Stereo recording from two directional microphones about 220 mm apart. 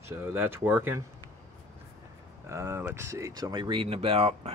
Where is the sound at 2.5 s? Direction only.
10° right (ahead or behind).